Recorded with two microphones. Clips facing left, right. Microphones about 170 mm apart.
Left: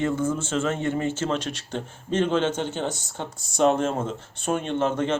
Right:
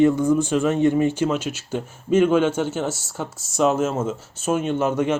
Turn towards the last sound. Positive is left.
turn(degrees=-10)  # may be behind; listen again after turning